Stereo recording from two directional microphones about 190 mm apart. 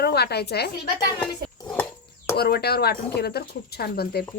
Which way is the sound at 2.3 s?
55° left (ahead or behind).